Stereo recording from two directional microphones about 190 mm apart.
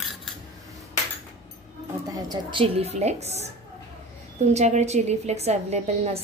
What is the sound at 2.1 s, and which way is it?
A woman's voice, 20° right (ahead or behind).